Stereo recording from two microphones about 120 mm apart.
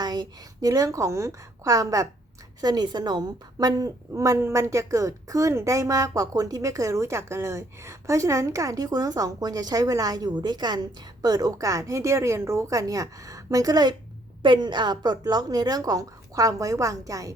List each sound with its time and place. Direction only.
0.0 s a woman's voice: 35° right (ahead or behind)